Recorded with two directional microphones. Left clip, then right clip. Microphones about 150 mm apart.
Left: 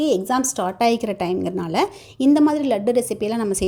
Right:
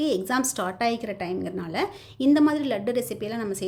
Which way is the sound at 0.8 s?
35° left (ahead or behind).